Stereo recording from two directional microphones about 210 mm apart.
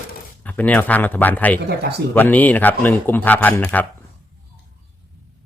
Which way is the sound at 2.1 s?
10° left (ahead or behind).